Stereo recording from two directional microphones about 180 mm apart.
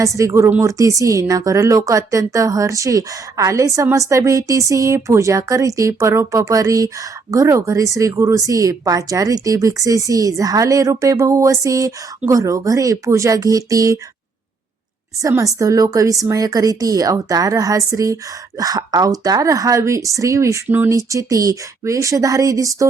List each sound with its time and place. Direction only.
0.0 s speech: 20° right (ahead or behind)
15.2 s a woman's voice: 20° right (ahead or behind)